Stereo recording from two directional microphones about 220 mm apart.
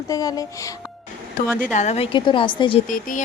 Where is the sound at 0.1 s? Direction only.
15° left (ahead or behind).